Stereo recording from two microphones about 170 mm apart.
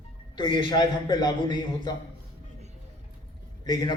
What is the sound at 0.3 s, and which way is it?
A man's voice, 25° left (ahead or behind).